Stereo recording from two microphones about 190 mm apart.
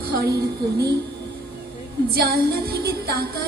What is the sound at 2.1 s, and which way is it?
Music, 55° right (ahead or behind).